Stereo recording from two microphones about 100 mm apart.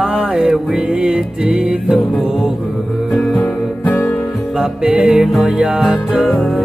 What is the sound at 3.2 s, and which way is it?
Music, 15° left (ahead or behind).